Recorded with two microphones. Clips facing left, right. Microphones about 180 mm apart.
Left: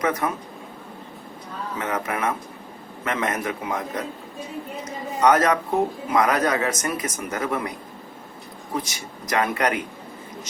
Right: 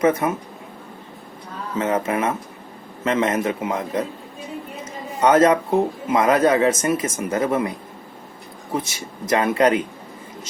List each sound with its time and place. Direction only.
0.0 s speech: 25° right (ahead or behind)
1.8 s speech: 25° right (ahead or behind)
5.2 s speech: 25° right (ahead or behind)
8.7 s speech: 25° right (ahead or behind)